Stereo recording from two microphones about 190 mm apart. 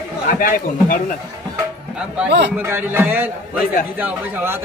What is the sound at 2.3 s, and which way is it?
Speech, 65° right (ahead or behind).